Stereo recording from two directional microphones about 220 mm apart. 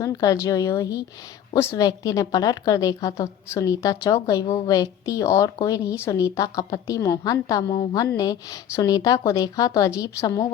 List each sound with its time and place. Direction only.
0.0 s speech: 15° left (ahead or behind)